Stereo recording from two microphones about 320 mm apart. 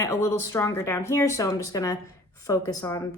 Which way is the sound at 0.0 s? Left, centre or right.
Centre.